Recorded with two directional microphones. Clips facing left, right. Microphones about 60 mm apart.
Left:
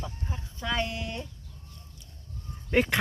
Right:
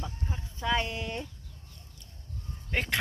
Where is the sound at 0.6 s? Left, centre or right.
Centre.